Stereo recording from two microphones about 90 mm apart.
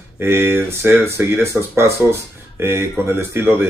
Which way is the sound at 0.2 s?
25° right (ahead or behind).